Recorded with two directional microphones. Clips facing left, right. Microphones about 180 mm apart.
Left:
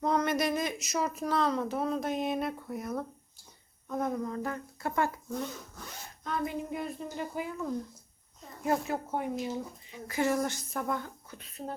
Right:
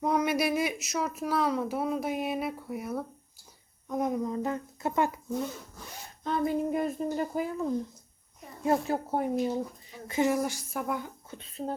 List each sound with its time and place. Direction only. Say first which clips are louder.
0.0 s speech: right 1 dB; 10° right (ahead or behind)
6.2 s a woman's voice: right 6 dB; 35° right (ahead or behind)
8.6 s a woman's voice: right 3 dB; 30° right (ahead or behind)
10.1 s speech: right 2 dB; 20° right (ahead or behind)
11.3 s speech: right 5 dB; 25° right (ahead or behind)